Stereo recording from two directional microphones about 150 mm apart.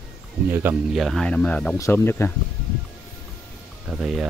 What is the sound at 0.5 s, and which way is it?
Speech, 15° right (ahead or behind).